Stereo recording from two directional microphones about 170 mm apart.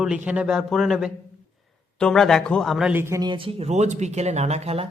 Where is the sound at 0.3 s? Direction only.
5° right (ahead or behind).